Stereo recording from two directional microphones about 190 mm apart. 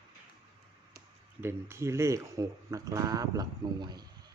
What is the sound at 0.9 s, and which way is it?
Speech, 15° right (ahead or behind).